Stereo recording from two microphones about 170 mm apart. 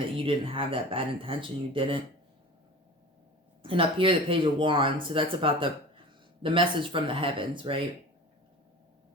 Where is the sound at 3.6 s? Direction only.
30° right (ahead or behind).